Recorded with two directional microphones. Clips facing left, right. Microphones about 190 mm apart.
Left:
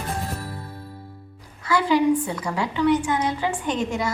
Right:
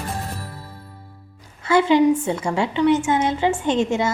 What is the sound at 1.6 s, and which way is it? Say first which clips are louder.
A woman's voice: right 4 dB; 25° right (ahead or behind).